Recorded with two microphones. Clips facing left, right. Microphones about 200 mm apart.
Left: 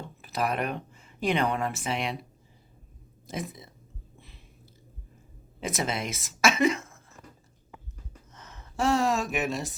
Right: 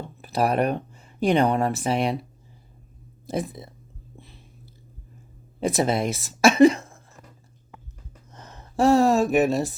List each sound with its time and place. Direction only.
0.2 s speech: 35° right (ahead or behind)
3.2 s speech: 35° right (ahead or behind)
5.5 s speech: 35° right (ahead or behind)
8.3 s speech: 35° right (ahead or behind)